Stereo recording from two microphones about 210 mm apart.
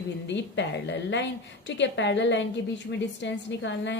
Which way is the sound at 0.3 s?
55° left (ahead or behind).